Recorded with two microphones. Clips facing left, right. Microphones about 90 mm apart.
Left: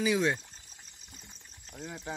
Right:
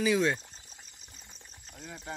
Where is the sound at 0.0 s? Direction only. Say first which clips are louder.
Right 1 dB; 15° left (ahead or behind).